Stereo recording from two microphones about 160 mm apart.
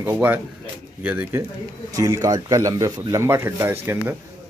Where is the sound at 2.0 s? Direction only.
20° right (ahead or behind).